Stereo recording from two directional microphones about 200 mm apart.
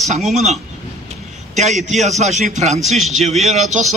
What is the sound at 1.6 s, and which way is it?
Speech, 35° right (ahead or behind).